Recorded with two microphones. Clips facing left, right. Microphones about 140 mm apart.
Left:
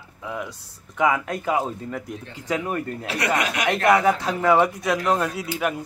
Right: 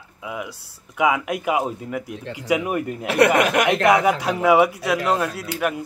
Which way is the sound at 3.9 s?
15° right (ahead or behind).